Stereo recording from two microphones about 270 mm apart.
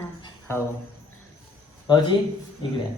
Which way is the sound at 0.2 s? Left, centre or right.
Centre.